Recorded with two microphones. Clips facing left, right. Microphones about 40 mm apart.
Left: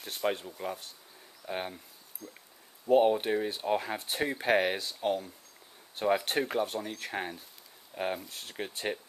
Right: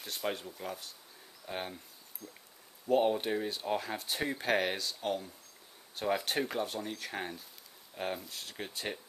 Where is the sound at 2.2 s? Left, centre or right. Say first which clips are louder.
Left 3 dB; left.